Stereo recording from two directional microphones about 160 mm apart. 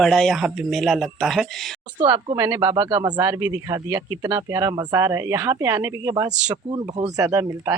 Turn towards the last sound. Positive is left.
turn(degrees=-20)  # may be behind; listen again after turning